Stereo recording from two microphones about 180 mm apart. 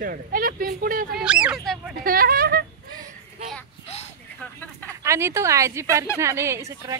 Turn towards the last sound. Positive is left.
turn(degrees=-15)  # may be behind; listen again after turning